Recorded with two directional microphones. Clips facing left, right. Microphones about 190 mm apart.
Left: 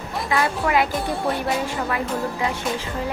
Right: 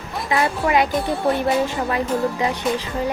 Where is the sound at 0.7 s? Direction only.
25° right (ahead or behind).